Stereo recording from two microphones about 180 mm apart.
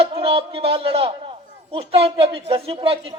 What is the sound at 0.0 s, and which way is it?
A man's voice, 30° right (ahead or behind).